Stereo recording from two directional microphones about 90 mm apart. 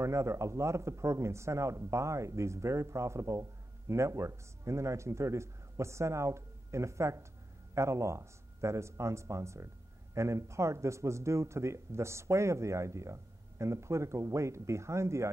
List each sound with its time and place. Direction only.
0.0 s speech: 30° right (ahead or behind)